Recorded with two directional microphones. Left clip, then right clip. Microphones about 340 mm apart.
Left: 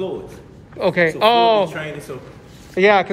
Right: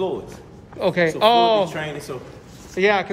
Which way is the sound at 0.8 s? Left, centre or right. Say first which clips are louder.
Left 2 dB; centre.